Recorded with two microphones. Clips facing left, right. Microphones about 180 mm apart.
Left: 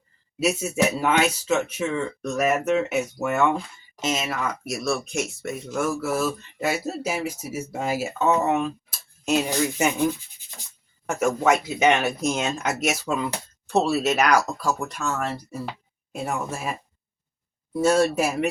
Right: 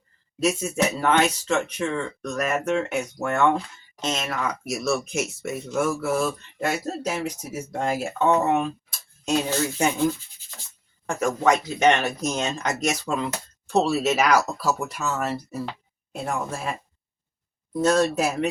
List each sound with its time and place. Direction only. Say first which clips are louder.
0.3 s speech: even; 5° left (ahead or behind)
9.3 s speech: left 1 dB; 15° left (ahead or behind); by 15.6 s 5° right (ahead or behind)
16.1 s speech: even; 10° left (ahead or behind)
17.7 s speech: left 1 dB; 10° left (ahead or behind)